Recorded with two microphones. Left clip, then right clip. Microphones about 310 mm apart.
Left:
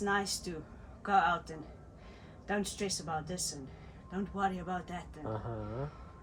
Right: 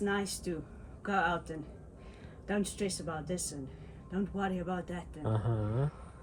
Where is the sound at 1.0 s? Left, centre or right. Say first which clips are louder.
Left 3 dB; centre.